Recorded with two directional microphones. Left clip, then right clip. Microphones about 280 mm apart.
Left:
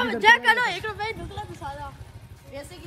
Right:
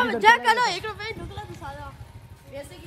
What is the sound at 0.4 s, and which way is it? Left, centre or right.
Speech, centre.